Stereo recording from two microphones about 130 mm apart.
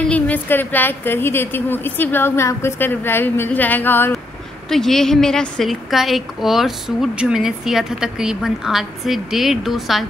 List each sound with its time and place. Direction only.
0.0 s a woman's voice: 10° left (ahead or behind)
4.6 s a woman's voice: 5° left (ahead or behind)